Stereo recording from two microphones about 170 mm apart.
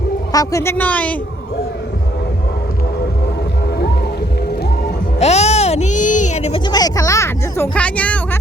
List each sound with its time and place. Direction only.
0.3 s speech: 20° left (ahead or behind)
5.2 s a sound: 40° left (ahead or behind)
6.7 s speech: 25° left (ahead or behind)